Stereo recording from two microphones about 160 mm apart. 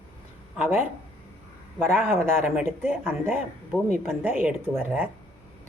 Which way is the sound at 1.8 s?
15° right (ahead or behind).